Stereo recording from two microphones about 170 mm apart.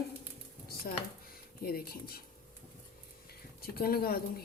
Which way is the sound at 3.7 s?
60° left (ahead or behind).